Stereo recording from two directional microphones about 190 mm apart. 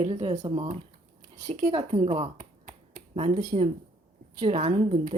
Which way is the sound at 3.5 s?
30° right (ahead or behind).